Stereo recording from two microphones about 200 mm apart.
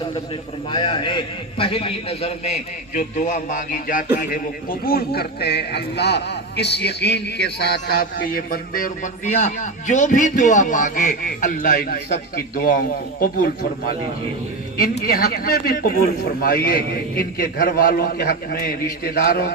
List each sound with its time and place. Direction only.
0.7 s a man's voice: 25° left (ahead or behind); by 19.5 s 50° left (ahead or behind)